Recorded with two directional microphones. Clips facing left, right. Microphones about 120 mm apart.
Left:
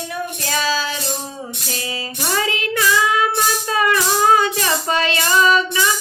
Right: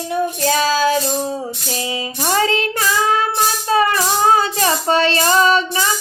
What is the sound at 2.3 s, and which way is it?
Child singing, 35° right (ahead or behind).